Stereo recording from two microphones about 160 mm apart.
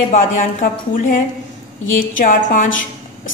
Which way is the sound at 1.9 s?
55° left (ahead or behind).